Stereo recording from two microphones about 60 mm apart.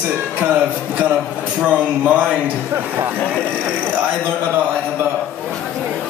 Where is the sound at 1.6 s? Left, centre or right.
Right.